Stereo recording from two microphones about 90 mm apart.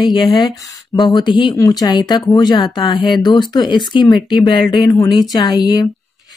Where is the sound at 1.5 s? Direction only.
45° left (ahead or behind); by 4.9 s 60° left (ahead or behind).